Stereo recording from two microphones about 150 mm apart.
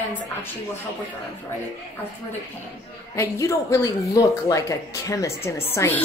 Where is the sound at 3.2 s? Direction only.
20° left (ahead or behind).